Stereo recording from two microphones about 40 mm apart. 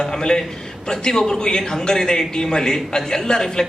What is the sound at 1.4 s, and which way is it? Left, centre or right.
Speech, centre.